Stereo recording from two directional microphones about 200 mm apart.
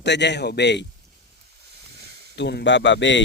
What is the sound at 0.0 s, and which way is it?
Speech, 60° left (ahead or behind).